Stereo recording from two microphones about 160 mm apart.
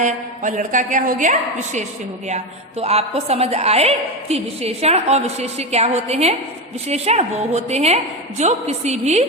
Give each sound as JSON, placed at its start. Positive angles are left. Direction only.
{"t": 0.0, "sound": "a woman's voice", "side_deg": -50}